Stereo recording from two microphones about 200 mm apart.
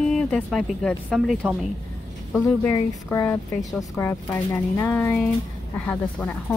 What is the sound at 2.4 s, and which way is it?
Speech, 10° left (ahead or behind).